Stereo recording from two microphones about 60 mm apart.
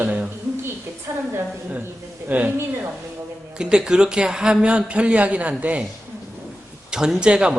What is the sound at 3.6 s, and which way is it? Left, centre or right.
A woman's voice, centre.